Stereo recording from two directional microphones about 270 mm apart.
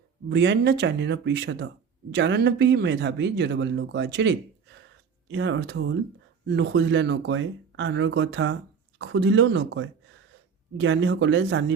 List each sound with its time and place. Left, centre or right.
0.3 s speech: right